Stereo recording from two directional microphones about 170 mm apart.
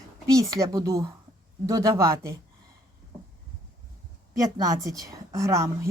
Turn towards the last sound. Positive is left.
turn(degrees=-15)  # may be behind; listen again after turning